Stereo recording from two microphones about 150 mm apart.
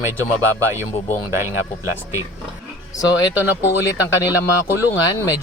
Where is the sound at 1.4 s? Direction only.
20° right (ahead or behind).